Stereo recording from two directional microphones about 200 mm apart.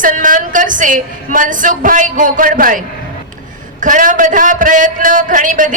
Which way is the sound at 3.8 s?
40° right (ahead or behind).